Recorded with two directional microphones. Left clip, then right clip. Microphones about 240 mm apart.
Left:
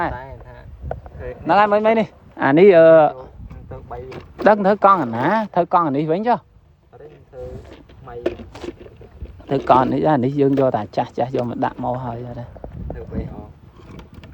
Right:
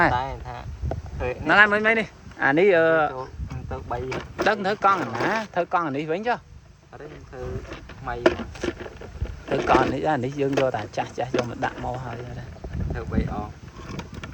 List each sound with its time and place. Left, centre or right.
0.0 s speech: centre
1.5 s speech: centre
2.4 s speech: left
3.7 s vehicle: right
4.4 s speech: left
8.0 s speech: centre
9.5 s speech: left